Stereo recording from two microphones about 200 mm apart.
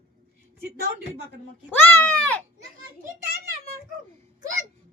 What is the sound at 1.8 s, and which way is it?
Speech, 10° left (ahead or behind).